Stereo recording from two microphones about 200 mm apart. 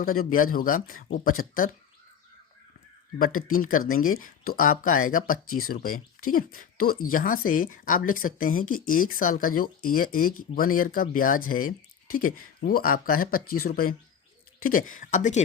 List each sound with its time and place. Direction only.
0.0 s speech: 45° left (ahead or behind)
3.2 s speech: 45° left (ahead or behind)